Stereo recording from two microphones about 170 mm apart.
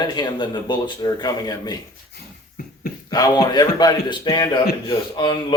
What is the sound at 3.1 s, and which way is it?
A man's voice, 20° left (ahead or behind).